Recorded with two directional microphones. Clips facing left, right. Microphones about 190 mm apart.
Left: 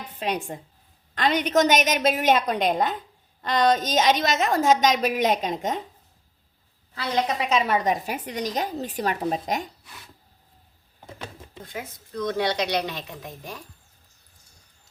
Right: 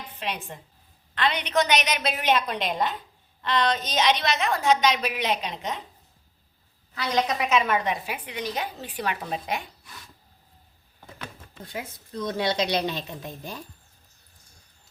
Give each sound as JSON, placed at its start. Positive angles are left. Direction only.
{"t": 0.2, "sound": "a woman's voice", "side_deg": 40}
{"t": 6.9, "sound": "a woman's voice", "side_deg": 30}
{"t": 11.0, "sound": "a sound", "side_deg": 25}
{"t": 12.1, "sound": "speech", "side_deg": -25}